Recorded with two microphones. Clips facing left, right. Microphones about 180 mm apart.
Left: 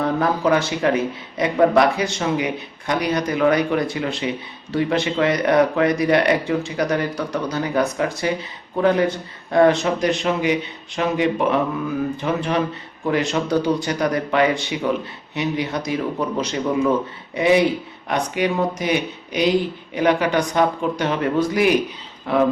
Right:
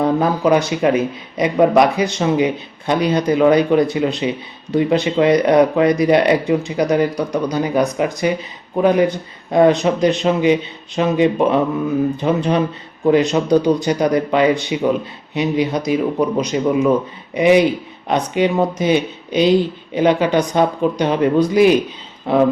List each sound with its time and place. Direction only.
0.0 s speech: 20° right (ahead or behind)